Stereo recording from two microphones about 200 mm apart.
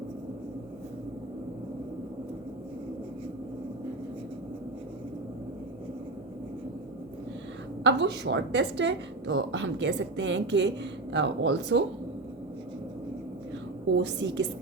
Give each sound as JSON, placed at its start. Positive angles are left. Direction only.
{"t": 7.9, "sound": "a woman's voice", "side_deg": -60}
{"t": 13.9, "sound": "a woman's voice", "side_deg": -60}